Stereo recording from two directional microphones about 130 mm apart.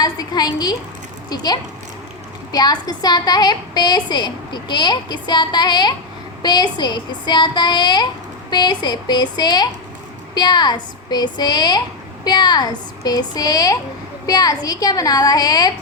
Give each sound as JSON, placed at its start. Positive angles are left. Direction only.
{"t": 0.0, "sound": "a woman's voice", "side_deg": 30}